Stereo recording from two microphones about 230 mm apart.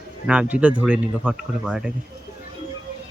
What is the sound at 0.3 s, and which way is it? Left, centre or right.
Speech, centre.